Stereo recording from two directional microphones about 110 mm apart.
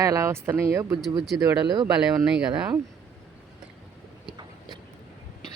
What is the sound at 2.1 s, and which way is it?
Speech, 5° right (ahead or behind).